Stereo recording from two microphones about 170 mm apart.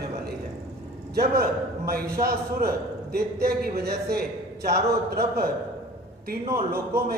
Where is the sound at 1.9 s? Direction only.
60° right (ahead or behind).